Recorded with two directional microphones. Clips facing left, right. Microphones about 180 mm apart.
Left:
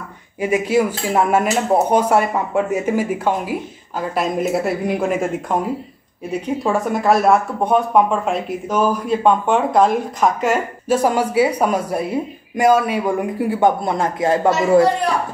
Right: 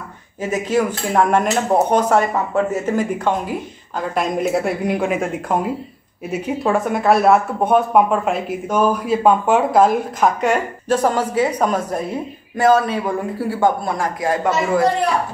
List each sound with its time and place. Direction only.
0.4 s speech: 10° left (ahead or behind); by 14.9 s 30° left (ahead or behind)